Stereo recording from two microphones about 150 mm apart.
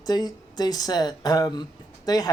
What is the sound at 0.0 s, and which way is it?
Speech, 25° left (ahead or behind).